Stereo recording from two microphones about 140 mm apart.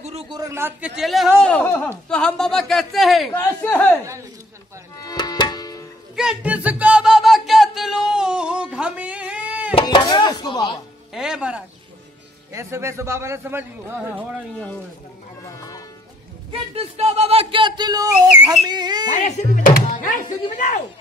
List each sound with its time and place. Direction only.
0.3 s a man's voice: 25° right (ahead or behind); by 1.3 s centre (ahead or behind)
1.4 s speech: 10° left (ahead or behind)
3.3 s speech: 10° left (ahead or behind)
5.0 s tabla: 30° left (ahead or behind)
6.1 s music: 5° right (ahead or behind)
9.8 s chopping: 30° left (ahead or behind)
11.1 s a man's voice: 5° right (ahead or behind)
12.5 s a man's voice: 20° right (ahead or behind)
16.7 s speech: 45° right (ahead or behind); by 19.0 s 30° right (ahead or behind)
19.1 s speech: 60° left (ahead or behind); by 20.2 s 75° left (ahead or behind)
20.5 s speech: 60° left (ahead or behind)